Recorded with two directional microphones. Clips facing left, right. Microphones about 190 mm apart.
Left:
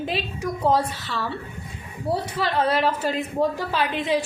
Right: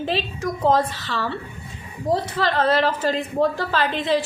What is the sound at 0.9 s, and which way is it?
Speech, 90° right.